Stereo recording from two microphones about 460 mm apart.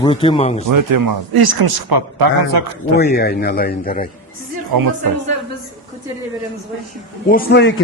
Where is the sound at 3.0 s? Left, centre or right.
Centre.